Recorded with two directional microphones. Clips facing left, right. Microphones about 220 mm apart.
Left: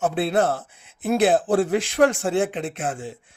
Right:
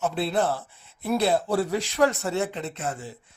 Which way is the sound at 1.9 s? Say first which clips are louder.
Left 4 dB; 50° left (ahead or behind).